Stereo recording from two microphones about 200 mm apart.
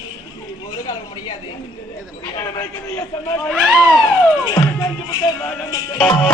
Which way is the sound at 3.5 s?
Centre (ahead or behind).